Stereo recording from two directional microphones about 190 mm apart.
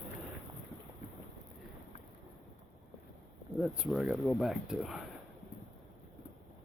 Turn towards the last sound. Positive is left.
turn(degrees=0)  # may be behind; listen again after turning